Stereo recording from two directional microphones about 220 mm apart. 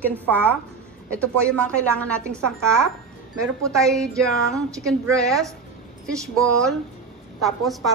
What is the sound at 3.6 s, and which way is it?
A woman's voice, centre (ahead or behind).